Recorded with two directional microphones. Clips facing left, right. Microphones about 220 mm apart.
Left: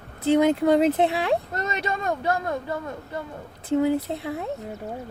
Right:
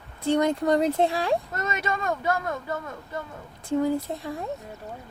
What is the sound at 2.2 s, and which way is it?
Speech, 30° left (ahead or behind).